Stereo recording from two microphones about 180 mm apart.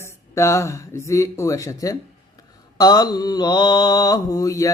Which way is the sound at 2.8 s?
20° left (ahead or behind).